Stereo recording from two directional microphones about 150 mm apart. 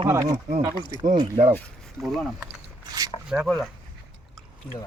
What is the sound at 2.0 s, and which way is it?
Speech, centre (ahead or behind).